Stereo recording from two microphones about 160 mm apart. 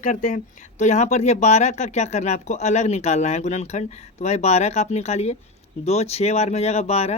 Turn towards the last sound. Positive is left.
turn(degrees=40)  # may be behind; listen again after turning